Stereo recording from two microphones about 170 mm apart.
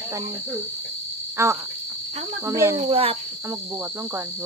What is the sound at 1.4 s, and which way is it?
Cricket, 15° right (ahead or behind).